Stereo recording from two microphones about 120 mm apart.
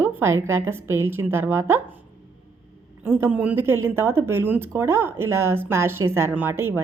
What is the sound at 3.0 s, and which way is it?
A woman's voice, 20° right (ahead or behind).